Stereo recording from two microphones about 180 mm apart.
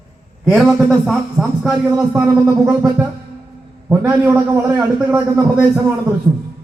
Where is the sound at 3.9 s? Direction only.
10° right (ahead or behind).